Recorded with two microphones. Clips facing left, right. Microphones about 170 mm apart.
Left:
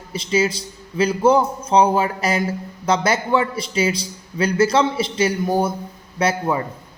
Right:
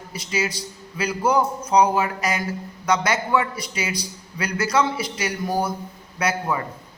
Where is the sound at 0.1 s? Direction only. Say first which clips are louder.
Left 7 dB; 25° left (ahead or behind).